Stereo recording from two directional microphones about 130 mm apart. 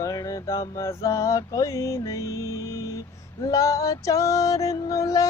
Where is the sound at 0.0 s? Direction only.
25° left (ahead or behind).